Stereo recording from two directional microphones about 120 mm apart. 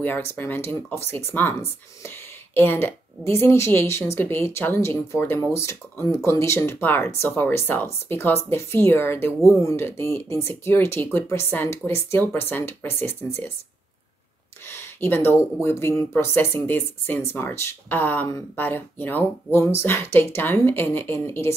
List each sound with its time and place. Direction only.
0.0 s speech: 20° left (ahead or behind)
14.7 s speech: 20° left (ahead or behind)